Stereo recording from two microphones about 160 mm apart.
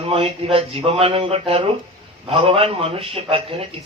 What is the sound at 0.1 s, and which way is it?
Speech, 40° right (ahead or behind).